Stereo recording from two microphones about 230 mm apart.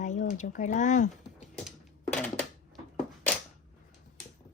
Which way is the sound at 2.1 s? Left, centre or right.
Centre.